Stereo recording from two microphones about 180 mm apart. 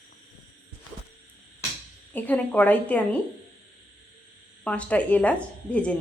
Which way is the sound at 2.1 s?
10° left (ahead or behind).